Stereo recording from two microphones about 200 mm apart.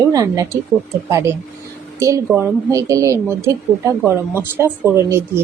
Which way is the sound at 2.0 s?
15° right (ahead or behind).